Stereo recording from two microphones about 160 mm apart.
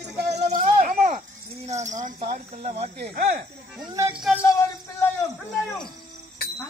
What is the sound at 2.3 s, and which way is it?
Speech, 45° right (ahead or behind).